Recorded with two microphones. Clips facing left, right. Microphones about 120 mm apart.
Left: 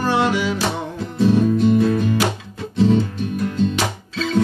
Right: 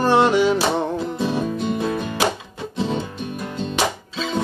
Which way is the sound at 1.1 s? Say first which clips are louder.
Left 6 dB; 15° right (ahead or behind).